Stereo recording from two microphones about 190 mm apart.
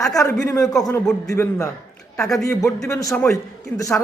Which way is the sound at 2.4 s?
15° left (ahead or behind).